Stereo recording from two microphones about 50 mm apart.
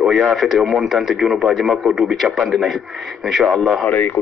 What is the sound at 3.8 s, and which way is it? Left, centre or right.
Speech, left.